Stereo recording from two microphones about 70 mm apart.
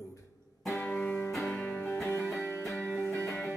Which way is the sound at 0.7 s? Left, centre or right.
Left.